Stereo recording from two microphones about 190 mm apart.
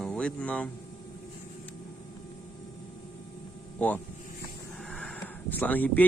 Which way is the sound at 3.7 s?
10° left (ahead or behind).